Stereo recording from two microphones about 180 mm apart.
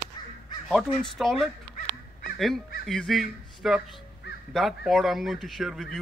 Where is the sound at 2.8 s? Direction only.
Centre (ahead or behind).